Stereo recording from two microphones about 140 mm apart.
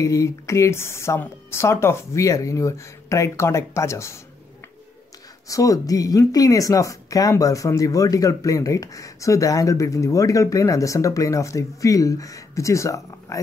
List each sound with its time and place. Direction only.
0.0 s speech: 20° left (ahead or behind)
5.5 s speech: 25° left (ahead or behind)